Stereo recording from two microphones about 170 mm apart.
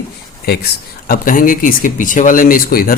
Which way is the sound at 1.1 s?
55° left (ahead or behind).